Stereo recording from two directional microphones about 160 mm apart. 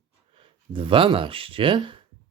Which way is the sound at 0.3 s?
35° right (ahead or behind).